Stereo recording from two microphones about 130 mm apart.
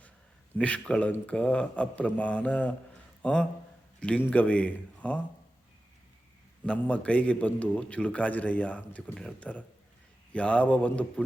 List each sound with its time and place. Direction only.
0.5 s a man's voice: 10° left (ahead or behind)
6.7 s a man's voice: 10° left (ahead or behind)